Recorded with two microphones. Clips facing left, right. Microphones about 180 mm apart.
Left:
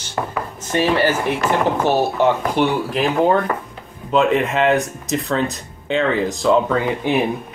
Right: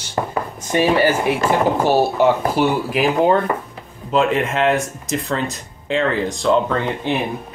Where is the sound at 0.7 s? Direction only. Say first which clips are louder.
Right 1 dB; 15° right (ahead or behind); by 6.8 s centre (ahead or behind).